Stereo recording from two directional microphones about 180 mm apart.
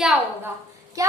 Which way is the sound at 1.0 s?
20° right (ahead or behind).